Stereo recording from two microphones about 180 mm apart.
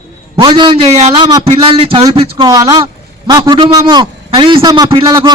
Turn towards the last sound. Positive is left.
turn(degrees=-20)  # may be behind; listen again after turning